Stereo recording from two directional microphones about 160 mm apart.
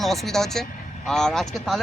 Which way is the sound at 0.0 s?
Centre (ahead or behind).